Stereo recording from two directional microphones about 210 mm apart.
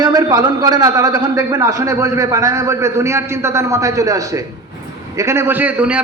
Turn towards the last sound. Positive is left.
turn(degrees=-5)  # may be behind; listen again after turning